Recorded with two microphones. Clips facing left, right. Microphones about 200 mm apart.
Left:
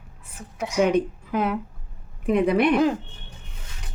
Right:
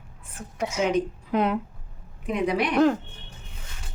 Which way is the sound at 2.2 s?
55° left (ahead or behind).